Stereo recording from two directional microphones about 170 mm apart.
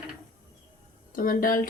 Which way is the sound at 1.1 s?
55° left (ahead or behind).